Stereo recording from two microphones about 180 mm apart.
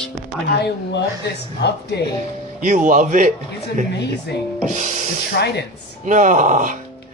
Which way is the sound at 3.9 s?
70° left (ahead or behind).